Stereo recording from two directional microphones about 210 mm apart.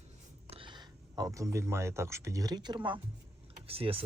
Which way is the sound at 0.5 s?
25° right (ahead or behind).